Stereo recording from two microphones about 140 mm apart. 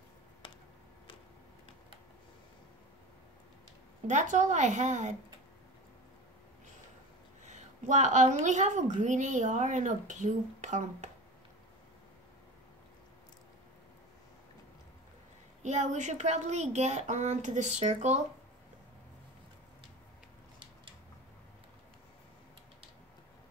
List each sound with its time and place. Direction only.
4.1 s a woman's voice: 60° right (ahead or behind)
7.4 s a woman's voice: 55° right (ahead or behind)
15.6 s a woman's voice: 55° right (ahead or behind)